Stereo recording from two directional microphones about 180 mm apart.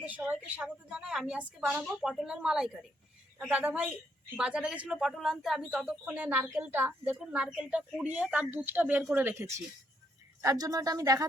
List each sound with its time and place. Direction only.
0.0 s a woman's voice: 10° right (ahead or behind)